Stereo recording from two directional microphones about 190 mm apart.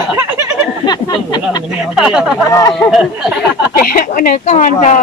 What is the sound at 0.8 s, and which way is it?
Speech, 20° left (ahead or behind).